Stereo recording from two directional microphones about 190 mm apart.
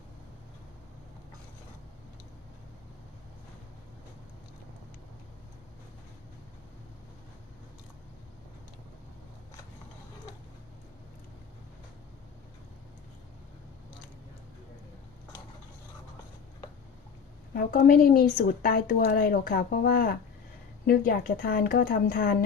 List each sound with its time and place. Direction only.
17.5 s speech: 50° left (ahead or behind)